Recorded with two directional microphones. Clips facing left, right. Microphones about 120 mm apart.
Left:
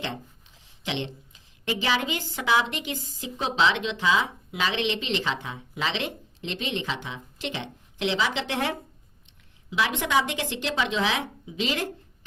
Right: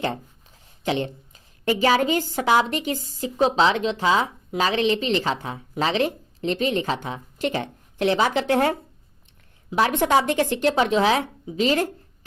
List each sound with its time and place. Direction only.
0.9 s a woman's voice: 45° right (ahead or behind)